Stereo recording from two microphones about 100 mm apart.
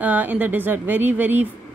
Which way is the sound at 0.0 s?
15° right (ahead or behind).